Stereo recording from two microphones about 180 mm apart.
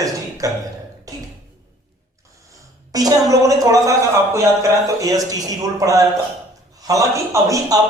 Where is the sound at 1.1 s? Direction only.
20° right (ahead or behind).